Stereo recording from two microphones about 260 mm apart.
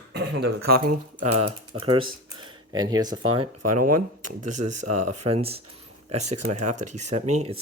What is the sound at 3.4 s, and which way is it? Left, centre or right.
Speech, right.